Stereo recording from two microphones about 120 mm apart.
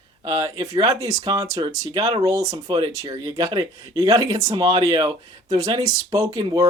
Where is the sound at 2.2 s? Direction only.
25° right (ahead or behind).